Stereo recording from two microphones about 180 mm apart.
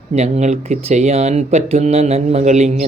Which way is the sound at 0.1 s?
40° right (ahead or behind).